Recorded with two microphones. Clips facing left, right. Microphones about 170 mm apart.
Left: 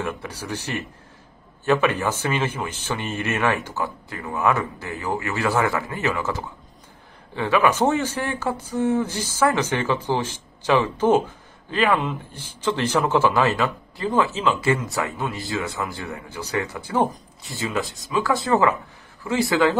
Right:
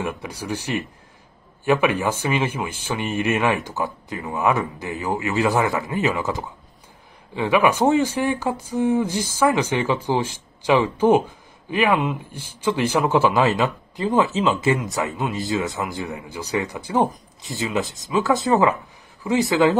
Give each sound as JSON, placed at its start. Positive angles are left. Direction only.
{"t": 0.0, "sound": "speech", "side_deg": -10}